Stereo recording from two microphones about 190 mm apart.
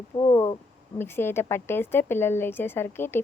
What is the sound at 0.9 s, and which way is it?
A woman's voice, 10° left (ahead or behind).